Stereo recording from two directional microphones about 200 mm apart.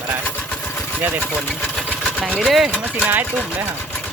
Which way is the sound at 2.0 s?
Centre (ahead or behind).